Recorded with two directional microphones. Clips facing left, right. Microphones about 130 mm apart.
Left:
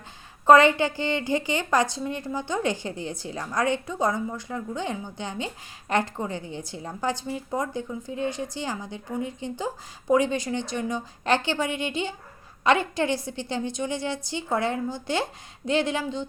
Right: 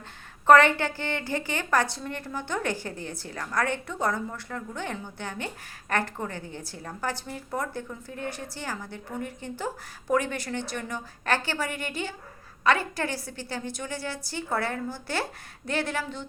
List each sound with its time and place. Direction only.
0.4 s a woman's voice: 15° left (ahead or behind)